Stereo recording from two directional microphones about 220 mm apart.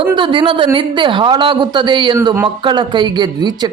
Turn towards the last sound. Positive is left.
turn(degrees=-20)  # may be behind; listen again after turning